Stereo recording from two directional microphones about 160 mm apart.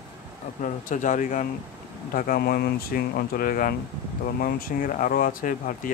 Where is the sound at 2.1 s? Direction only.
60° left (ahead or behind).